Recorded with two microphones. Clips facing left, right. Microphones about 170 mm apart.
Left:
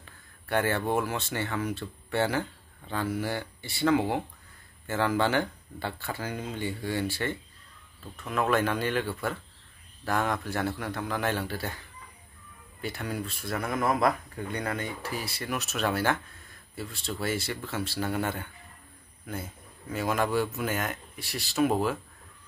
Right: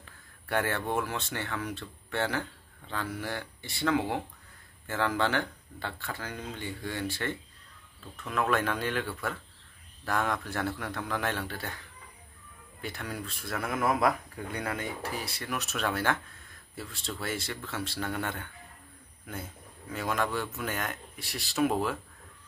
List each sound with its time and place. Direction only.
0.5 s speech: centre (ahead or behind)
12.8 s speech: centre (ahead or behind)
19.9 s speech: 5° left (ahead or behind)